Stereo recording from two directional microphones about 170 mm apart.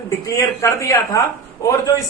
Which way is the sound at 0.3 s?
20° left (ahead or behind).